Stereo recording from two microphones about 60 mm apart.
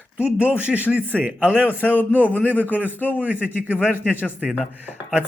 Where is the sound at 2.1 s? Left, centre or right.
Left.